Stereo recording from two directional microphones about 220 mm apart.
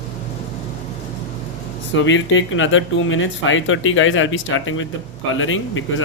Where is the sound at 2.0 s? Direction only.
60° left (ahead or behind).